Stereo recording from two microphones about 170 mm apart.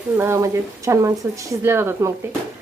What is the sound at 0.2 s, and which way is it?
Speech, 15° right (ahead or behind).